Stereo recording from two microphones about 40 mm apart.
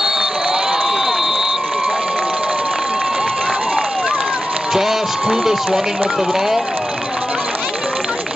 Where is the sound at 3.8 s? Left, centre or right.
Centre.